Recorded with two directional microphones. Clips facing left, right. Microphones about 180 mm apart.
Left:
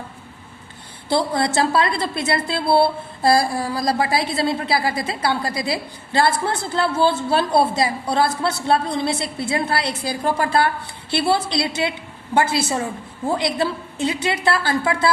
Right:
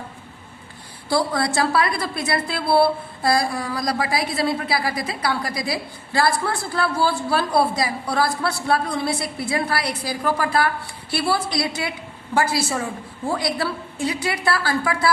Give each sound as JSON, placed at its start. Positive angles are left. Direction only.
{"t": 1.1, "sound": "a woman's voice", "side_deg": 25}